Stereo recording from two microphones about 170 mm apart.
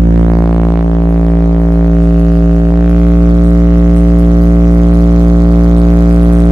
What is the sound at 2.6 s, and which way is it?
Didgeridoo, 10° right (ahead or behind).